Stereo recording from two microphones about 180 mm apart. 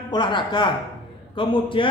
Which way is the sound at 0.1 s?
25° left (ahead or behind).